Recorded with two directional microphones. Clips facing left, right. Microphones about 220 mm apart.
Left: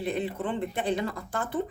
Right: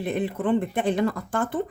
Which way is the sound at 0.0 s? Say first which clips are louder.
Right 4 dB; 50° right (ahead or behind).